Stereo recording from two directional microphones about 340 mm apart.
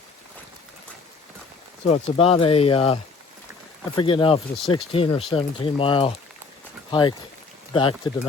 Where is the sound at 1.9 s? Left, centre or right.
Centre.